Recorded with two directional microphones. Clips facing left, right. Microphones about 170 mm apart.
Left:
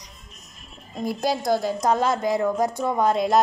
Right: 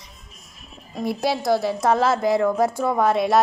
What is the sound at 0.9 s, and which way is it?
A woman's voice, 5° right (ahead or behind).